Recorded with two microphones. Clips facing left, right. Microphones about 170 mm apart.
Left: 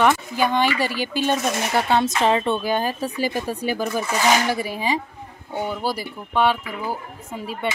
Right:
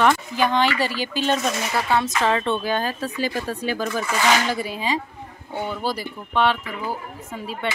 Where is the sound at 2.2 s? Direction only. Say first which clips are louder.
Left 2 dB; 15° left (ahead or behind).